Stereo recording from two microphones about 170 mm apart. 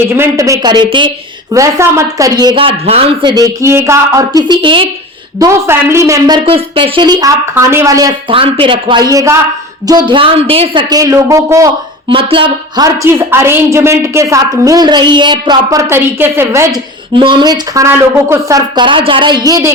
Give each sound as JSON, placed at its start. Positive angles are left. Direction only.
{"t": 0.1, "sound": "speech", "side_deg": -15}
{"t": 1.5, "sound": "speech", "side_deg": -15}
{"t": 2.4, "sound": "speech", "side_deg": -30}
{"t": 5.4, "sound": "speech", "side_deg": -15}
{"t": 7.5, "sound": "a woman's voice", "side_deg": -15}
{"t": 8.3, "sound": "a woman's voice", "side_deg": -30}
{"t": 12.0, "sound": "a woman's voice", "side_deg": -30}
{"t": 17.2, "sound": "speech", "side_deg": -25}